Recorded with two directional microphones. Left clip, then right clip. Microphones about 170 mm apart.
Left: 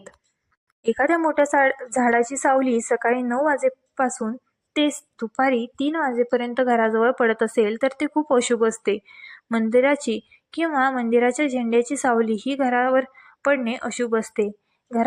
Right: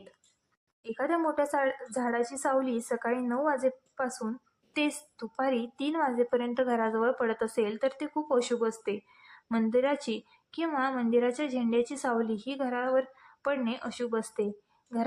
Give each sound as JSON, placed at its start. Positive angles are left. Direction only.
{"t": 0.8, "sound": "speech", "side_deg": 30}